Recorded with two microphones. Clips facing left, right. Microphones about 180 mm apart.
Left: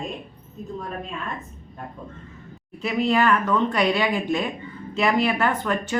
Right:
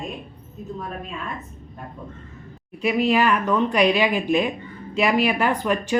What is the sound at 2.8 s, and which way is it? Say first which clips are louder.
Speech: right 2 dB; 10° right (ahead or behind).